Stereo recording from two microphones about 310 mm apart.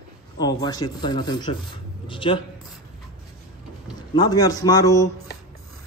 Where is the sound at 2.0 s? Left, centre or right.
Centre.